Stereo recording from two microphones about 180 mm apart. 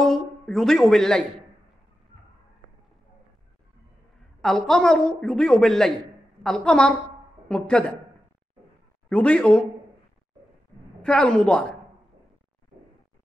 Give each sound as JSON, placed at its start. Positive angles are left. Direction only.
{"t": 0.0, "sound": "speech", "side_deg": 0}
{"t": 4.4, "sound": "a woman's voice", "side_deg": 0}
{"t": 9.1, "sound": "a woman's voice", "side_deg": 5}
{"t": 11.0, "sound": "a woman's voice", "side_deg": 5}